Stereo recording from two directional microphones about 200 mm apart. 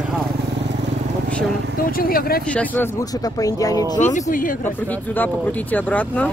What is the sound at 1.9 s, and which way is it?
Speech, 50° left (ahead or behind).